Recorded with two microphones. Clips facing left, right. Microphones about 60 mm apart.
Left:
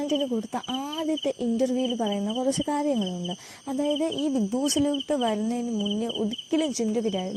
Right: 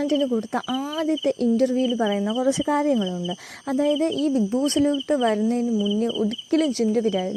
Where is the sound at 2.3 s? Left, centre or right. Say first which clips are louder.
Right 4 dB; right.